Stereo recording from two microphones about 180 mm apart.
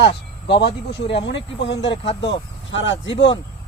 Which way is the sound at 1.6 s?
80° left.